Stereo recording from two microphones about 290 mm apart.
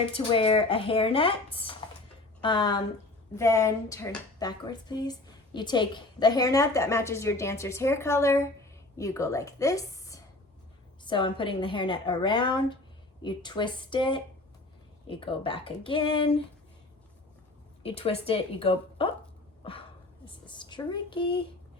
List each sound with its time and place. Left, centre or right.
0.1 s a woman's voice: centre
17.8 s speech: centre
20.2 s speech: centre